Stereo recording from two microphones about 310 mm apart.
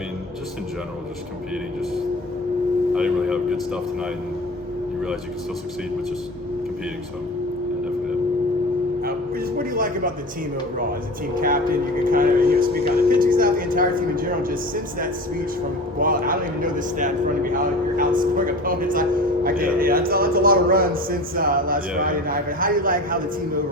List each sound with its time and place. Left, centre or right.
2.9 s speech: centre
9.0 s a sound: right
11.3 s a man's voice: right
12.8 s speech: centre
13.1 s a man's voice: right